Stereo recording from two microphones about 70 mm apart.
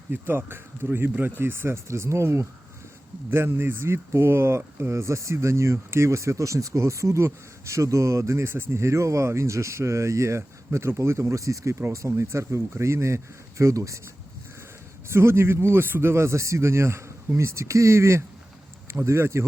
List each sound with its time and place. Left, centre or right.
0.1 s speech: right
3.2 s speech: right
15.0 s speech: right